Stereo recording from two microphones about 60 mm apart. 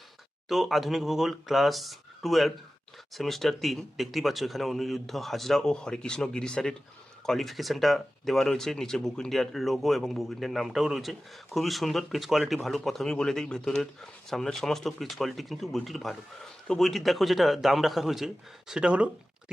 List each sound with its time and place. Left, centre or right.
0.4 s speech: centre
18.7 s speech: centre